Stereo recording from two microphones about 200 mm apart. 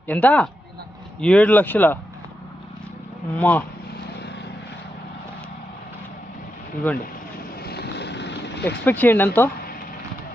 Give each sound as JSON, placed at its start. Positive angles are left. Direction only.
{"t": 0.1, "sound": "speech", "side_deg": 10}
{"t": 3.3, "sound": "speech", "side_deg": 5}
{"t": 6.8, "sound": "speech", "side_deg": 10}
{"t": 7.6, "sound": "vehicle", "side_deg": 55}
{"t": 8.8, "sound": "speech", "side_deg": 10}